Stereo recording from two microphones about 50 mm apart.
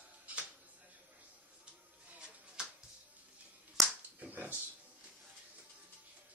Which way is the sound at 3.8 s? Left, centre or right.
Right.